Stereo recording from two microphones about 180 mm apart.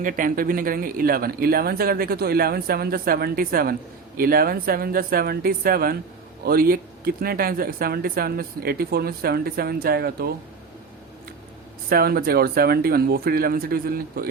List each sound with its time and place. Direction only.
0.0 s speech: 50° right (ahead or behind)
11.9 s speech: 55° right (ahead or behind)